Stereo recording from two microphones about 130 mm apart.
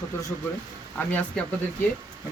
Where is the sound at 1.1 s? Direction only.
10° left (ahead or behind).